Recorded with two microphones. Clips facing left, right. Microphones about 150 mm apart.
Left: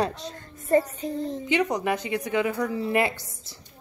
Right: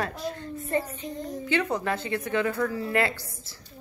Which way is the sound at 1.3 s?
20° left (ahead or behind).